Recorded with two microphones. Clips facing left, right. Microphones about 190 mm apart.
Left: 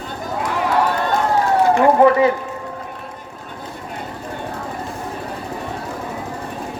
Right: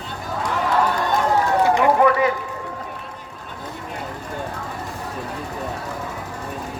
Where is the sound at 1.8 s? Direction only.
30° left (ahead or behind).